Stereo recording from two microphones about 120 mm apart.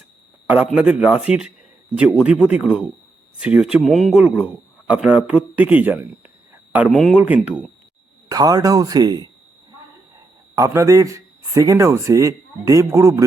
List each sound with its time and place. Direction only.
0.4 s speech: 10° right (ahead or behind)
6.5 s a sound: 15° right (ahead or behind)
6.9 s speech: centre (ahead or behind)
7.2 s speech: 10° right (ahead or behind)
8.3 s speech: 30° right (ahead or behind)
10.5 s a man's voice: 25° right (ahead or behind)